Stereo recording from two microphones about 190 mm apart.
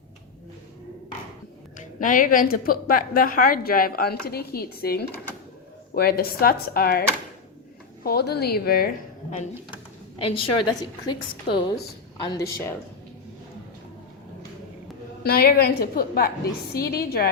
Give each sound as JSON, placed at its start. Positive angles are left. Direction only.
{"t": 1.8, "sound": "a woman's voice", "side_deg": 45}
{"t": 8.0, "sound": "a woman's voice", "side_deg": 55}
{"t": 10.2, "sound": "a woman's voice", "side_deg": 25}
{"t": 15.2, "sound": "a woman's voice", "side_deg": 55}